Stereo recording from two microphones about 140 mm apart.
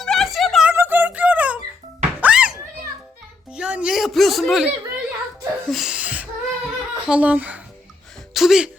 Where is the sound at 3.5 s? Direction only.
5° right (ahead or behind).